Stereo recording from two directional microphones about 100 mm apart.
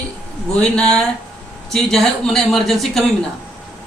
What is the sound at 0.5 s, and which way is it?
A man's voice, 10° left (ahead or behind).